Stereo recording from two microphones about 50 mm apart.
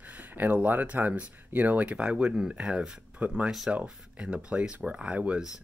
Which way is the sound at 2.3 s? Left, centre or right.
Centre.